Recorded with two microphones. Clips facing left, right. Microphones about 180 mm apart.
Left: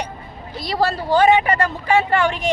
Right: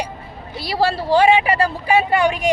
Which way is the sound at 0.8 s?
30° right (ahead or behind).